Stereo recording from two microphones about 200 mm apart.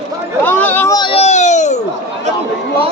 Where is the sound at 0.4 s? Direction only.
10° left (ahead or behind); by 1.8 s 35° left (ahead or behind).